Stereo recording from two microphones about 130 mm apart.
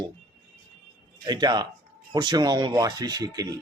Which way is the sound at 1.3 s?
30° right (ahead or behind).